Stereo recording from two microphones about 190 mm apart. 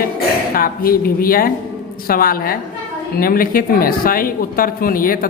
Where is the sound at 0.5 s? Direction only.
50° left (ahead or behind).